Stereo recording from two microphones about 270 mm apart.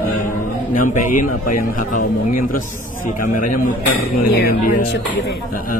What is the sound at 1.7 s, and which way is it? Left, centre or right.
Speech, left.